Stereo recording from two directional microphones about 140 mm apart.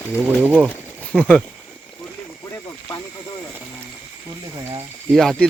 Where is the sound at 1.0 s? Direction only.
10° left (ahead or behind).